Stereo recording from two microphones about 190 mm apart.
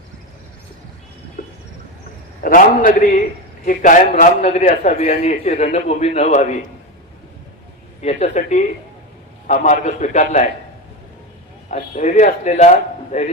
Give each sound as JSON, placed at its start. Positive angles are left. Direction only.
{"t": 1.4, "sound": "vehicle", "side_deg": 50}
{"t": 2.4, "sound": "a man's voice", "side_deg": 45}
{"t": 8.0, "sound": "a man's voice", "side_deg": 35}
{"t": 11.7, "sound": "a man's voice", "side_deg": 40}